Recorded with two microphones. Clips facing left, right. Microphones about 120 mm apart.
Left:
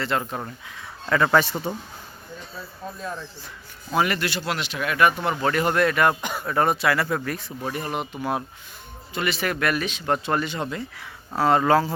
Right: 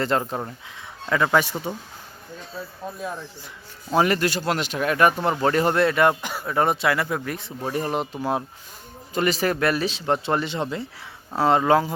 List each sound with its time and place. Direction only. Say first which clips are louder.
0.1 s speech: right 2 dB; 35° right (ahead or behind)
1.1 s speech: left 1 dB; 10° right (ahead or behind)
3.0 s speech: right 1 dB; 15° right (ahead or behind)
3.9 s speech: right 3 dB; 35° right (ahead or behind)
6.2 s speech: left 1 dB; 5° right (ahead or behind)
6.5 s speech: even; 20° right (ahead or behind)
9.1 s speech: right 4 dB; 40° right (ahead or behind); by 11.9 s 20° right (ahead or behind)